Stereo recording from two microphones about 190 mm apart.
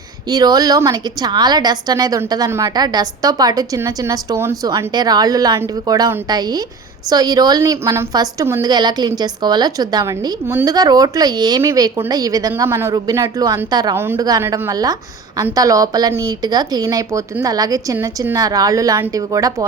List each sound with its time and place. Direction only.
0.3 s a woman's voice: 20° right (ahead or behind)